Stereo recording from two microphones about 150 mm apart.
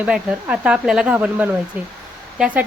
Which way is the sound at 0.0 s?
10° right (ahead or behind).